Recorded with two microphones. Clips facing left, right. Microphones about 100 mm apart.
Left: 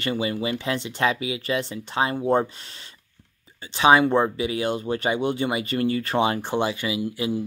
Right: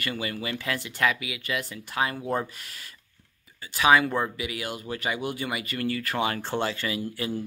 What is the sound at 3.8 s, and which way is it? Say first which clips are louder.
Speech: left 4 dB; 25° left (ahead or behind).